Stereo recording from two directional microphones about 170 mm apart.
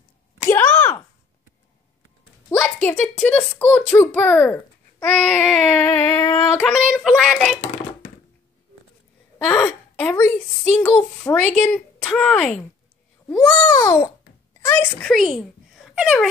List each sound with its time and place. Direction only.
0.5 s a sound: 10° left (ahead or behind)
2.6 s speech: 5° left (ahead or behind)
5.1 s child singing: 5° left (ahead or behind)
6.5 s speech: 5° left (ahead or behind)
9.4 s speech: 10° left (ahead or behind)
13.3 s babbling: 15° left (ahead or behind)
14.7 s a child's voice: 5° left (ahead or behind)